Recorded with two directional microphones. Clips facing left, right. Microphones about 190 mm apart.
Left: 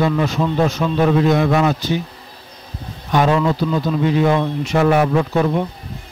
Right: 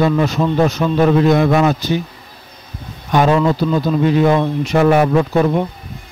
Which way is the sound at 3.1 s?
45° right (ahead or behind).